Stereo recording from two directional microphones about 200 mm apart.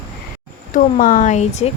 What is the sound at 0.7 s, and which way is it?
Speech, 40° left (ahead or behind).